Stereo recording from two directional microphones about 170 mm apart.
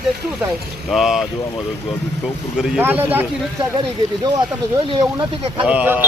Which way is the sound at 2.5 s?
5° right (ahead or behind).